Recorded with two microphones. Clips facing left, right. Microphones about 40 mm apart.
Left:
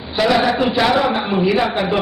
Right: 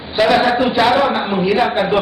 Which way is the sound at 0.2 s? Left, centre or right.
Centre.